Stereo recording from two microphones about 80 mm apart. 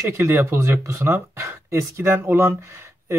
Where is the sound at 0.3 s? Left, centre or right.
Right.